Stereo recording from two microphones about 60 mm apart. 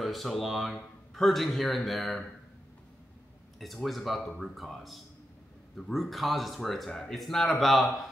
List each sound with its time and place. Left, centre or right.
0.0 s speech: centre
3.5 s speech: centre